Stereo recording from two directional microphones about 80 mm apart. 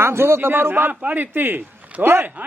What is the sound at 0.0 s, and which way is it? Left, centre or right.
A man's voice, right.